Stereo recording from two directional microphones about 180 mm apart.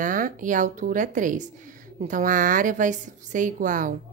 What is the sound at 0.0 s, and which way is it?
A woman's voice, 50° right (ahead or behind).